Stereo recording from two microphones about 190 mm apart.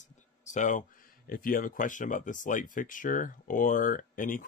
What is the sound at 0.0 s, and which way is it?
Speech, 40° left (ahead or behind).